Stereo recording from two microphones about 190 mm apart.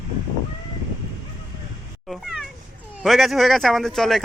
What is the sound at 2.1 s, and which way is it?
Cat, centre (ahead or behind).